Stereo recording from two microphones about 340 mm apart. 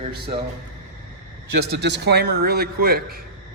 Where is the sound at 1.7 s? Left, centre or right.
Right.